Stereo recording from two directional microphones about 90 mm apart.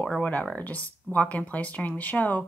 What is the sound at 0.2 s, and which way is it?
Speech, 15° left (ahead or behind).